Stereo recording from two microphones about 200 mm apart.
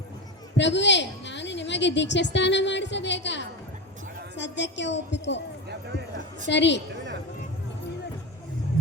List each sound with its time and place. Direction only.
0.5 s a woman's voice: 60° left (ahead or behind)
6.5 s a woman's voice: 60° left (ahead or behind)